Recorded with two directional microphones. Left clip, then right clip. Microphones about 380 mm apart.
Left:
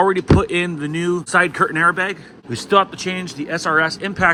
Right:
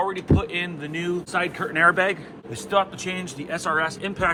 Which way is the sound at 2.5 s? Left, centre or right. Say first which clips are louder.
Left 7 dB; left.